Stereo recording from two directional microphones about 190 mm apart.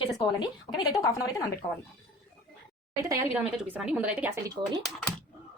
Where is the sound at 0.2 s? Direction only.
20° left (ahead or behind).